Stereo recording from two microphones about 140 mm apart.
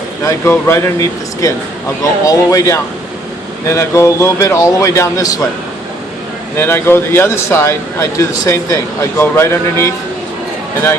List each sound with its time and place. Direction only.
0.3 s speech: 20° left (ahead or behind)
6.6 s speech: 15° left (ahead or behind)